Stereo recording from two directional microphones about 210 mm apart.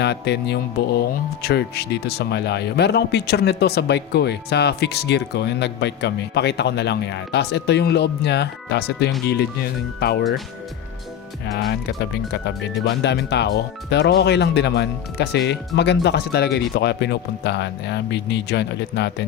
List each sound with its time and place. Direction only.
0.0 s speech: 55° left (ahead or behind)
11.5 s speech: 50° left (ahead or behind)